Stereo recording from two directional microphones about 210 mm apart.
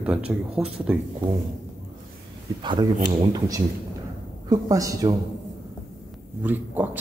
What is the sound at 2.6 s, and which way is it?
Speech, 20° right (ahead or behind).